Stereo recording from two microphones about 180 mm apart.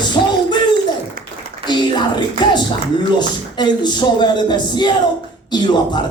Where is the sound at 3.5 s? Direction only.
25° left (ahead or behind).